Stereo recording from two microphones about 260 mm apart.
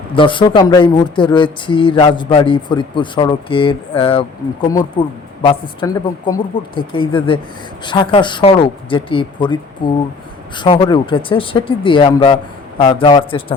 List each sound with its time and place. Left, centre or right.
0.1 s a man's voice: centre